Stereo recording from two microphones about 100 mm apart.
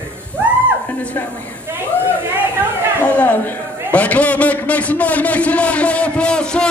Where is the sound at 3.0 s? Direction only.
15° left (ahead or behind).